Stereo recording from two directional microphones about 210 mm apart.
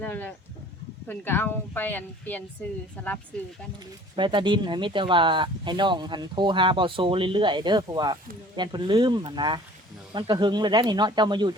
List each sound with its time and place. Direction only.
0.0 s speech: 10° left (ahead or behind)
4.1 s speech: 20° right (ahead or behind)